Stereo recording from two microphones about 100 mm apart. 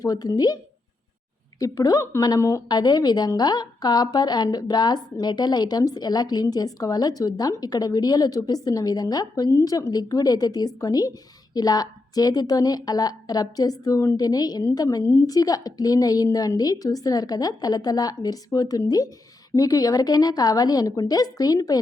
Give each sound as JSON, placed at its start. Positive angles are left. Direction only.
{"t": 0.0, "sound": "a woman's voice", "side_deg": 40}
{"t": 2.6, "sound": "a woman's voice", "side_deg": 45}